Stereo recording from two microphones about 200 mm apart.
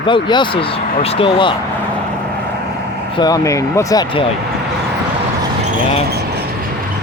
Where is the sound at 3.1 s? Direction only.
20° left (ahead or behind).